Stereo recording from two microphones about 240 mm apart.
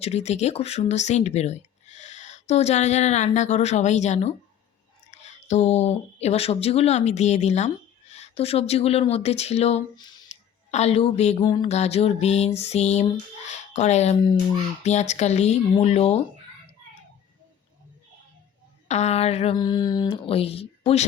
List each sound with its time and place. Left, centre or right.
0.0 s speech: left
18.9 s speech: left